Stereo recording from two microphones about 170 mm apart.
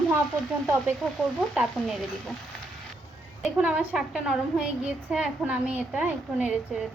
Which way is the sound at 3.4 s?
5° right (ahead or behind).